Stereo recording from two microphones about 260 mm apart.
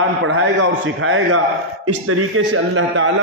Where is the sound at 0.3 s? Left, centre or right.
Right.